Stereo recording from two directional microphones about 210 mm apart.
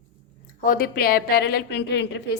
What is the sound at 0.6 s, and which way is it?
A woman's voice, 45° left (ahead or behind).